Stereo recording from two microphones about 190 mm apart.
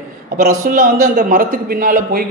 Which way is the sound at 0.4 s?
45° right (ahead or behind).